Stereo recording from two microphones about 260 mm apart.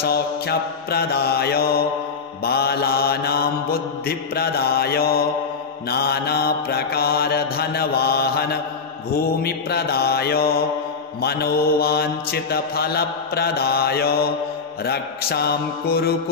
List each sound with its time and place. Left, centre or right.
0.0 s mantra: left